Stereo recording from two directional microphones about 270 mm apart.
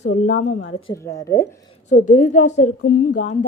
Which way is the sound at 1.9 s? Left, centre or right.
Left.